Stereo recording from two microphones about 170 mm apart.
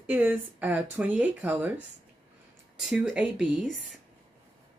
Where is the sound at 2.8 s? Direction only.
5° right (ahead or behind).